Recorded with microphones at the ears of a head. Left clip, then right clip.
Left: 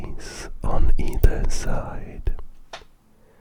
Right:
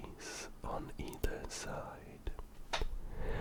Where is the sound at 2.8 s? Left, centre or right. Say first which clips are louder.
Right 8 dB; right.